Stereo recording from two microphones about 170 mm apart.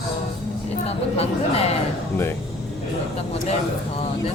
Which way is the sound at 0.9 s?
35° left (ahead or behind).